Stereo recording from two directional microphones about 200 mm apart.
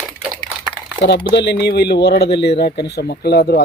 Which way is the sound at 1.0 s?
55° left (ahead or behind).